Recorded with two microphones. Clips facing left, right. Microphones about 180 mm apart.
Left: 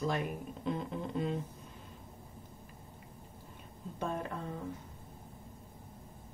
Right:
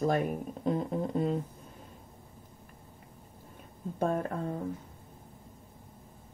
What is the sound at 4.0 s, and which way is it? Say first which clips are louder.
Speech: right 7 dB; 50° right (ahead or behind).